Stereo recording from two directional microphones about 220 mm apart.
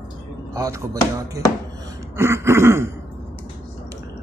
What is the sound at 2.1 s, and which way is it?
Speech, 10° right (ahead or behind).